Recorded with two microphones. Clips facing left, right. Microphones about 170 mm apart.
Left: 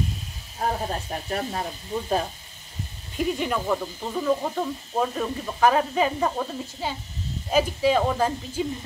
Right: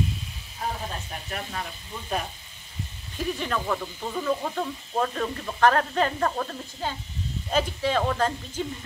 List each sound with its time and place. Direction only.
0.6 s speech: 45° left (ahead or behind)
3.2 s speech: 15° left (ahead or behind)